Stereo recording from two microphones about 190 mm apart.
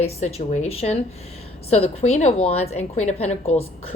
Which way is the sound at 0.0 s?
35° left (ahead or behind).